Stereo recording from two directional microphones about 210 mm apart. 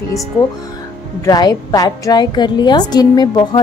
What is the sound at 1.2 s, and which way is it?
A woman's voice, 20° left (ahead or behind).